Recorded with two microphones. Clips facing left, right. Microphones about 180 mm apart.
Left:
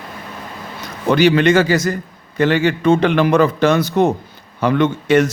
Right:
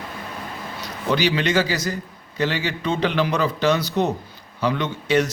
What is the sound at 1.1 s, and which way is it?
Speech, 50° left (ahead or behind).